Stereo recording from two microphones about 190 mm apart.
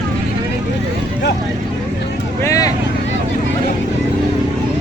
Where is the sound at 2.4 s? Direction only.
20° left (ahead or behind).